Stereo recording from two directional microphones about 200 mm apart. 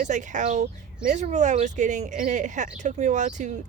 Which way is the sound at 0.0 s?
40° right (ahead or behind).